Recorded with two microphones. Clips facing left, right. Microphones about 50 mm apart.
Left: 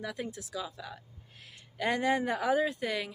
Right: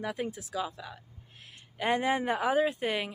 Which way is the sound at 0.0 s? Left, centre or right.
Right.